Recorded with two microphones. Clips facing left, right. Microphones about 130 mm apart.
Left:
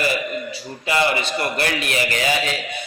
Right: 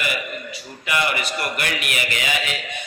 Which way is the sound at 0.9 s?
30° left (ahead or behind).